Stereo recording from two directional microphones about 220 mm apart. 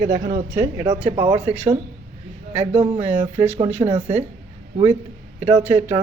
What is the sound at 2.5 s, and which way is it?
Speech, 10° right (ahead or behind).